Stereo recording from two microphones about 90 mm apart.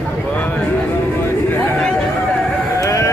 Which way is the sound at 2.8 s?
35° left (ahead or behind).